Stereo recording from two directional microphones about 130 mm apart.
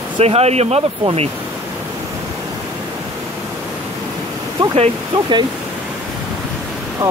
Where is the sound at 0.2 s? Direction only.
55° right (ahead or behind).